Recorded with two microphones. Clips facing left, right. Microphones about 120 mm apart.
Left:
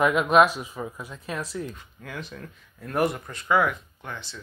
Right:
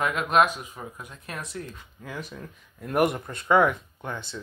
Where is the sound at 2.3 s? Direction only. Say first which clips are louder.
Even; 15° right (ahead or behind).